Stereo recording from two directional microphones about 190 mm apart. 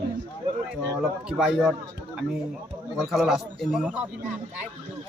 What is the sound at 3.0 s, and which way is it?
Speech, centre (ahead or behind).